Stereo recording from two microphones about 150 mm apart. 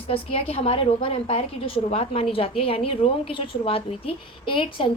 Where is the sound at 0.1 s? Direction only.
40° left (ahead or behind).